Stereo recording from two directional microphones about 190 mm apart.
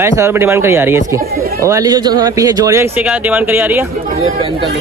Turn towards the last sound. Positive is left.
turn(degrees=-10)  # may be behind; listen again after turning